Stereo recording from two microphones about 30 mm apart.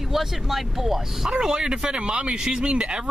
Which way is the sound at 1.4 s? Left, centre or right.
Right.